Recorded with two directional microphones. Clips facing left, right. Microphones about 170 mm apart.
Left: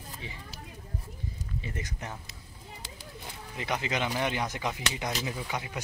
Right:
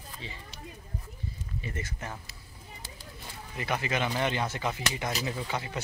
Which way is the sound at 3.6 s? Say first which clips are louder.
Right 1 dB; 20° left (ahead or behind).